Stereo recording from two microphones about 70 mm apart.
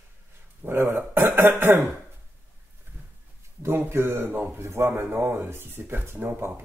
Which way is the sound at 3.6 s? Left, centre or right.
Right.